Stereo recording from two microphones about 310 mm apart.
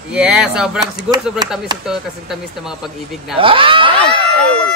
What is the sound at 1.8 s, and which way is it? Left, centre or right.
Speech, centre.